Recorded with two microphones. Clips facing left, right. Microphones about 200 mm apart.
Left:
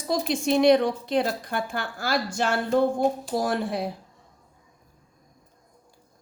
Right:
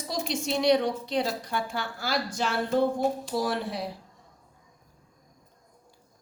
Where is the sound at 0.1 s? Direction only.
55° left (ahead or behind).